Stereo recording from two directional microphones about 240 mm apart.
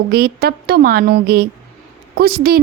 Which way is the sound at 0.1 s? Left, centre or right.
Right.